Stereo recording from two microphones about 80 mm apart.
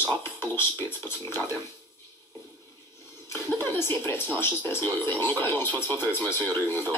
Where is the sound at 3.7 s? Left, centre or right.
Left.